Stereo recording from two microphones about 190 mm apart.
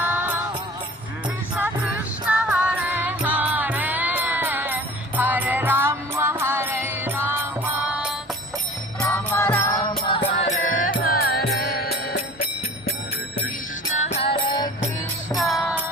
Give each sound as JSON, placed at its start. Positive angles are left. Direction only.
{"t": 0.0, "sound": "music", "side_deg": -10}
{"t": 1.5, "sound": "music", "side_deg": -10}
{"t": 9.0, "sound": "music", "side_deg": 15}
{"t": 10.3, "sound": "music", "side_deg": 40}
{"t": 13.9, "sound": "music", "side_deg": 35}
{"t": 15.4, "sound": "music", "side_deg": 0}